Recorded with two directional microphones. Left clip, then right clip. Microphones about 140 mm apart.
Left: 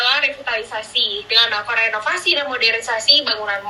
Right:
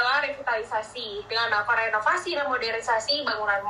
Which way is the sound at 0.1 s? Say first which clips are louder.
Left 7 dB; 40° left (ahead or behind).